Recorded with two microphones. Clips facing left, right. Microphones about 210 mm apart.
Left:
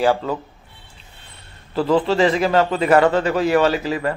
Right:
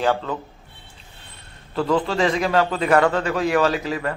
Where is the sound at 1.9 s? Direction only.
30° left (ahead or behind).